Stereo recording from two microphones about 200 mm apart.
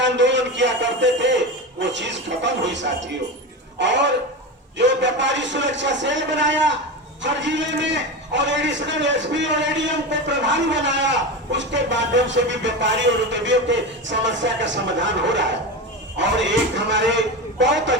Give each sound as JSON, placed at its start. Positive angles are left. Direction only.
{"t": 0.0, "sound": "a man's voice", "side_deg": -65}